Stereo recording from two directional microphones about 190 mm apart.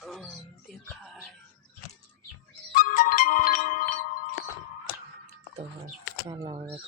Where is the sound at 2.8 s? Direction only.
45° left (ahead or behind).